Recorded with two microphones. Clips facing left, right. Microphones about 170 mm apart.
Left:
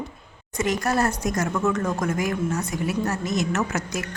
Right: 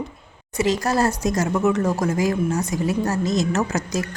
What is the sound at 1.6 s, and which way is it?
Speech, 20° right (ahead or behind).